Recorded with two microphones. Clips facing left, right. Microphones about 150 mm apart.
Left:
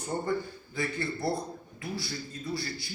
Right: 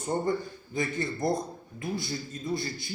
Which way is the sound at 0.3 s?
20° right (ahead or behind).